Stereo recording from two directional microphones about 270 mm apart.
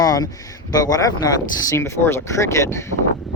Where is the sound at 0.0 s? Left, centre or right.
Centre.